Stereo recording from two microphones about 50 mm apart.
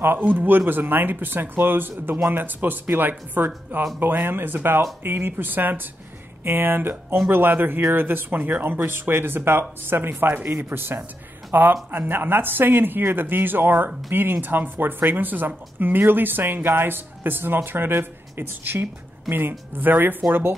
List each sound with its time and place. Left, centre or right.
0.0 s speech: right